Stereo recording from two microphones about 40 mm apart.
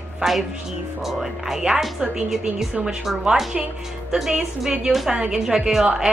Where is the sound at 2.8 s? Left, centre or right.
Centre.